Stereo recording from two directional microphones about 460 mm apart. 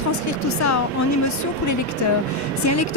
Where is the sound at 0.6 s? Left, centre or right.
Left.